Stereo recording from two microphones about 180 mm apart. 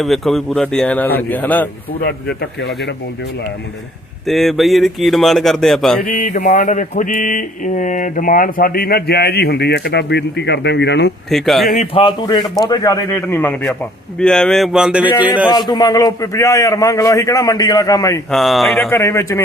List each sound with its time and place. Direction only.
0.0 s speech: centre (ahead or behind)
2.0 s mantra: 60° left (ahead or behind)
4.3 s speech: centre (ahead or behind)
6.1 s mantra: 45° left (ahead or behind); by 11.1 s 70° left (ahead or behind)
11.3 s speech: centre (ahead or behind)
11.9 s a man's voice: 25° left (ahead or behind); by 15.1 s 5° right (ahead or behind)
15.4 s a man's voice: 25° left (ahead or behind)
18.3 s speech: centre (ahead or behind)
18.9 s speech: 15° left (ahead or behind)